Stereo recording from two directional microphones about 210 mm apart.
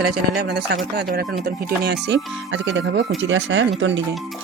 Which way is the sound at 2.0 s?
60° right (ahead or behind).